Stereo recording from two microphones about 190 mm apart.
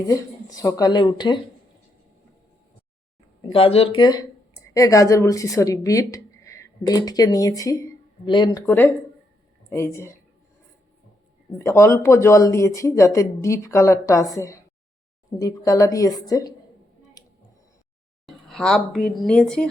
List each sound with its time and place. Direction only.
0.1 s speech: 20° left (ahead or behind)
3.4 s speech: 30° left (ahead or behind)
8.6 s speech: 10° left (ahead or behind)
11.5 s speech: 15° left (ahead or behind)
17.2 s tick-tock: 20° left (ahead or behind)
18.3 s speech: centre (ahead or behind)